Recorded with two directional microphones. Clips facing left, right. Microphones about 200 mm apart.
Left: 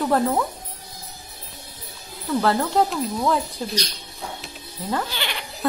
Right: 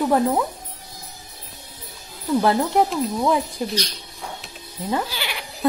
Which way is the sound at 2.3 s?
15° right (ahead or behind).